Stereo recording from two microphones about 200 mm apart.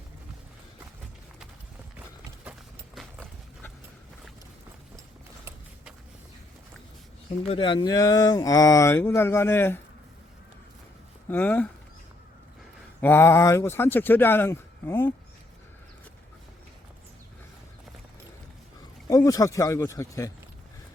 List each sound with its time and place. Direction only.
2.4 s clip-clop: 5° right (ahead or behind)
7.4 s speech: 25° left (ahead or behind)
11.3 s speech: 10° left (ahead or behind)
13.0 s speech: 10° left (ahead or behind)
19.0 s speech: 15° left (ahead or behind)